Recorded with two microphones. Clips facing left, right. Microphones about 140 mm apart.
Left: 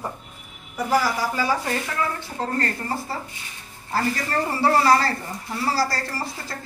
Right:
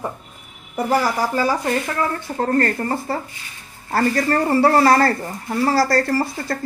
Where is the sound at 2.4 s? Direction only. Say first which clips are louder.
Right 8 dB; 50° right (ahead or behind).